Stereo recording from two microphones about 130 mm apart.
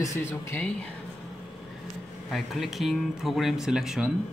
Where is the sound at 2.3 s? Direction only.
Centre (ahead or behind).